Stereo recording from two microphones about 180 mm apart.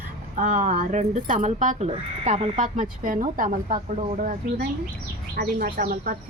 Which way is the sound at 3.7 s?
30° right (ahead or behind).